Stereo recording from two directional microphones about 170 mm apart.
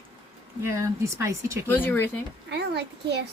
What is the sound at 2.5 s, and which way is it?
Speech, 80° right.